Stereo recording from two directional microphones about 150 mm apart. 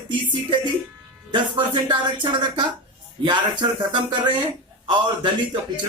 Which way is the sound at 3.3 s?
30° right (ahead or behind).